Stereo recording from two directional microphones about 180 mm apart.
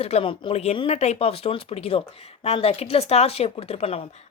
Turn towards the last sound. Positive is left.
turn(degrees=35)  # may be behind; listen again after turning